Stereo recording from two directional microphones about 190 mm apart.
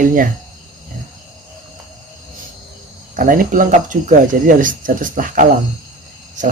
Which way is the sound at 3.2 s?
45° right (ahead or behind).